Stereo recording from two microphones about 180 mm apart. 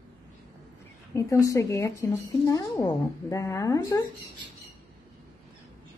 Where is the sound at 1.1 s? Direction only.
20° left (ahead or behind).